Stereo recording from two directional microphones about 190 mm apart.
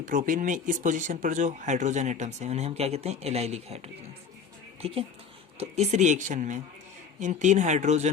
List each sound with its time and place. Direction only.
0.0 s speech: 45° right (ahead or behind)